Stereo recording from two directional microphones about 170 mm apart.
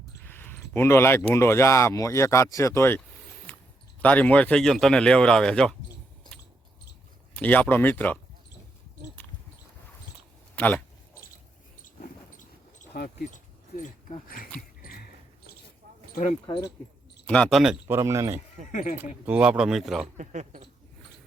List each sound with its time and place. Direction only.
0.2 s speech: 10° left (ahead or behind)
4.0 s speech: 10° left (ahead or behind)
7.3 s speech: 10° left (ahead or behind)
10.5 s speech: 10° left (ahead or behind)
11.8 s a sound: 50° left (ahead or behind)
14.5 s a sound: 10° left (ahead or behind)
16.5 s speech: 25° left (ahead or behind)
17.2 s speech: 5° left (ahead or behind)
17.8 s speech: 15° right (ahead or behind)
18.7 s speech: 50° left (ahead or behind)
18.9 s speech: 10° right (ahead or behind)
20.1 s speech: 45° right (ahead or behind)